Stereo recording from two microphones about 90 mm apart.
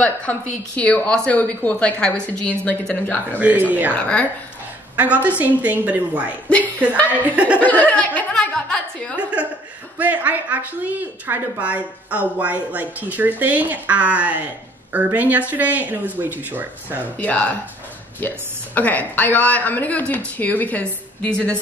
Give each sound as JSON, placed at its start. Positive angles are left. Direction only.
{"t": 0.0, "sound": "a woman's voice", "side_deg": 15}
{"t": 3.3, "sound": "a woman's voice", "side_deg": -15}
{"t": 3.9, "sound": "a woman's voice", "side_deg": 15}
{"t": 4.9, "sound": "a woman's voice", "side_deg": -15}
{"t": 7.5, "sound": "a woman's voice", "side_deg": 20}
{"t": 9.9, "sound": "a woman's voice", "side_deg": -20}
{"t": 17.2, "sound": "a woman's voice", "side_deg": 15}
{"t": 18.8, "sound": "a woman's voice", "side_deg": 20}